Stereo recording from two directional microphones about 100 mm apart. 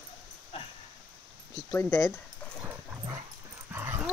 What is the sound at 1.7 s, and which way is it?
Speech, 25° left (ahead or behind).